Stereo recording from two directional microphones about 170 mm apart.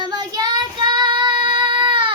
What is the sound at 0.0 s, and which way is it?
Child singing, 25° right (ahead or behind).